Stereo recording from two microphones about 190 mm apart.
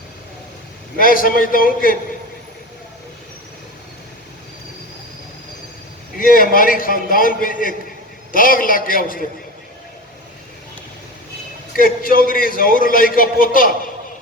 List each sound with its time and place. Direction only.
0.9 s a man's voice: 45° left (ahead or behind)
6.1 s a man's voice: 45° left (ahead or behind)
11.8 s a man's voice: 50° left (ahead or behind)